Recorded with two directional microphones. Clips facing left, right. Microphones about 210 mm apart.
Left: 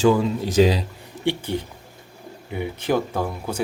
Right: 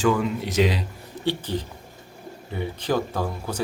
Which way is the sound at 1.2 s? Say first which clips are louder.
Left 2 dB; 15° left (ahead or behind).